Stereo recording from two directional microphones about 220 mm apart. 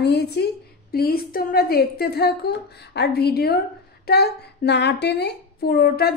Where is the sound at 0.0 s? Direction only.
50° left (ahead or behind).